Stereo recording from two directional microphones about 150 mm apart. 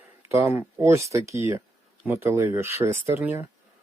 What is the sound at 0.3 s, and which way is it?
Speech, 15° right (ahead or behind).